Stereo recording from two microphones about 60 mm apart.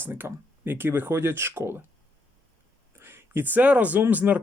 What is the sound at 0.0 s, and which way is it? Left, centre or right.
Speech, right.